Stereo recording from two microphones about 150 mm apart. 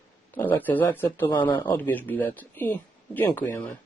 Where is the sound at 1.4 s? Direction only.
30° left (ahead or behind).